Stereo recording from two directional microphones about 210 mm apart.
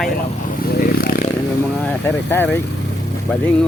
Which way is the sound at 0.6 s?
45° left (ahead or behind).